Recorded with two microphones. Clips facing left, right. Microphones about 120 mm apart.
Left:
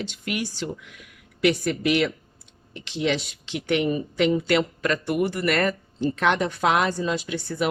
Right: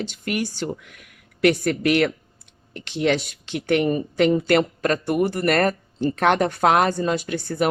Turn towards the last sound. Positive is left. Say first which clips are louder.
# right 3 dB
turn(degrees=-50)  # may be behind; listen again after turning